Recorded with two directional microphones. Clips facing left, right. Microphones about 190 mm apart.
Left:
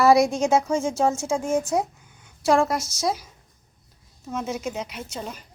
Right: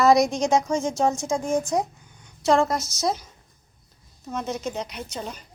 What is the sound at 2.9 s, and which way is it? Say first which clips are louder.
A woman's voice: even; 5° left (ahead or behind).